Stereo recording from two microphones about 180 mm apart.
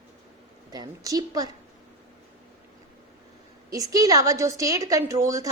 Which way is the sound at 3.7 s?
20° right (ahead or behind).